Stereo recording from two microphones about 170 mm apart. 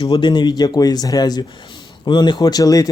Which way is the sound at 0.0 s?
30° left (ahead or behind).